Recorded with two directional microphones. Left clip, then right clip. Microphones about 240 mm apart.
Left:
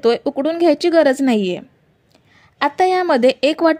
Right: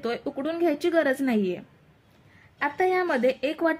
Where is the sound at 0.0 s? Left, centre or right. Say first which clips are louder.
Left 13 dB; left.